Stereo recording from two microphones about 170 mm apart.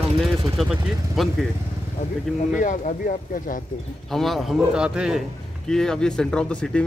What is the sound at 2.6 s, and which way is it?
Speech, 45° left (ahead or behind).